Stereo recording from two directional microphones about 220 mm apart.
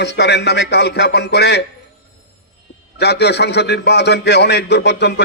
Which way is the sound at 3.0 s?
50° left (ahead or behind).